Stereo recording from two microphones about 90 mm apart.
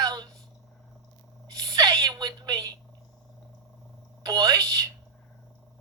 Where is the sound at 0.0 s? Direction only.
50° right (ahead or behind).